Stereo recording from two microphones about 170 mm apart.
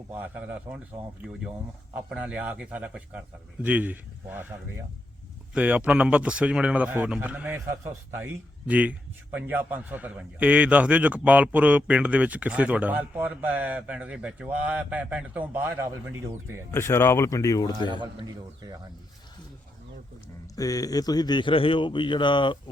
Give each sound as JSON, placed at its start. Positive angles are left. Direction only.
{"t": 0.1, "sound": "a man's voice", "side_deg": -10}
{"t": 2.0, "sound": "a man's voice", "side_deg": -5}
{"t": 5.5, "sound": "a man's voice", "side_deg": -5}
{"t": 16.7, "sound": "speech", "side_deg": 15}
{"t": 20.6, "sound": "speech", "side_deg": 20}